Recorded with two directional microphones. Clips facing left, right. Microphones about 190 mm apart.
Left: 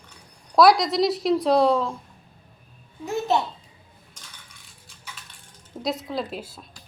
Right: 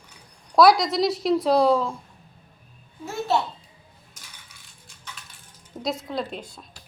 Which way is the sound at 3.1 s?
15° left (ahead or behind).